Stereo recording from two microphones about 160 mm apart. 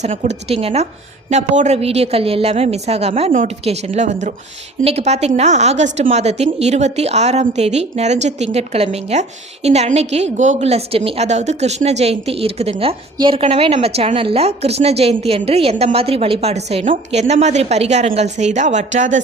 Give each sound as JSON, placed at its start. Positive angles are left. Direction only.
{"t": 0.0, "sound": "a woman's voice", "side_deg": -45}